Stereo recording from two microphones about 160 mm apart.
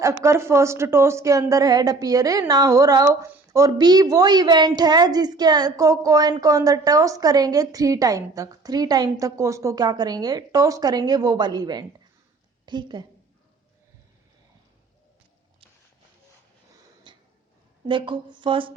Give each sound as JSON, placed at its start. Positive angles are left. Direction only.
{"t": 0.0, "sound": "a woman's voice", "side_deg": -20}
{"t": 17.1, "sound": "a sound", "side_deg": -30}
{"t": 17.8, "sound": "speech", "side_deg": -30}